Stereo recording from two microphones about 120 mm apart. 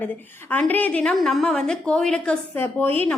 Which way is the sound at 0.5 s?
15° left (ahead or behind).